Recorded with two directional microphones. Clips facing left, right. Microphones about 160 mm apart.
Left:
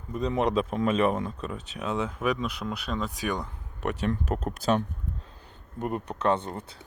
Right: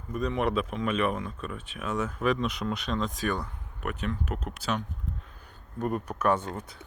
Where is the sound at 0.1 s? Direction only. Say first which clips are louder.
Left 2 dB; 25° left (ahead or behind).